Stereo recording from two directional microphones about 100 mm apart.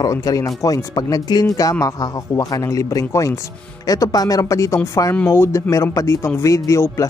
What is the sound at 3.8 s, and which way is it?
Speech, 40° left (ahead or behind).